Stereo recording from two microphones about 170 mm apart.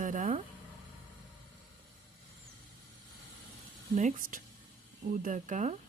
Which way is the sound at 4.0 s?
50° right (ahead or behind).